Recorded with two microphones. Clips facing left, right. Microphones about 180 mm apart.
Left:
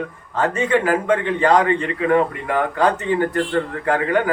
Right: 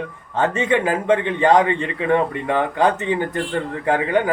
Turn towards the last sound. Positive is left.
turn(degrees=-20)  # may be behind; listen again after turning